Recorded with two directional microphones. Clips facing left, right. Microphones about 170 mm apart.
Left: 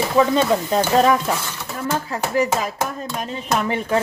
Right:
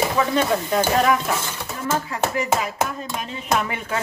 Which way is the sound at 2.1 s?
35° left (ahead or behind).